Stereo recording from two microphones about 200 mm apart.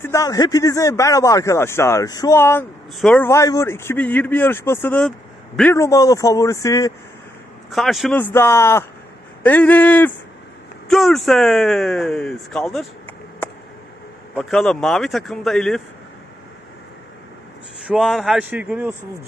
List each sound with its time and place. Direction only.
0.0 s speech: 15° left (ahead or behind)
7.7 s speech: centre (ahead or behind)
8.2 s speech: 10° left (ahead or behind)
17.7 s speech: centre (ahead or behind)